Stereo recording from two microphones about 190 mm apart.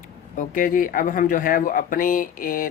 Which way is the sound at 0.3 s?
45° left (ahead or behind).